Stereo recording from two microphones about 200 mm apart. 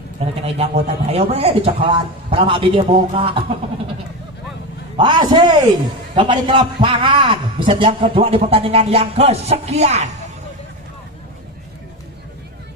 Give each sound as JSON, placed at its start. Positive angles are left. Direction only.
{"t": 0.6, "sound": "a man's voice", "side_deg": -30}
{"t": 4.9, "sound": "a man's voice", "side_deg": -20}